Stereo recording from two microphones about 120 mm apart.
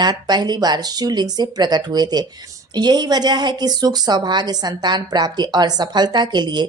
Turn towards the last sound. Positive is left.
turn(degrees=-40)  # may be behind; listen again after turning